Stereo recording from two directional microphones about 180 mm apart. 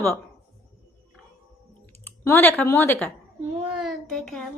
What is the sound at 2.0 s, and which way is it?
Speech, 10° left (ahead or behind).